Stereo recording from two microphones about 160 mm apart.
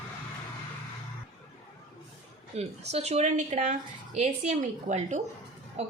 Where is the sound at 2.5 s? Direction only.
40° right (ahead or behind).